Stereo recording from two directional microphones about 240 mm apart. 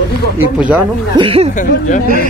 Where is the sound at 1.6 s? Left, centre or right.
Left.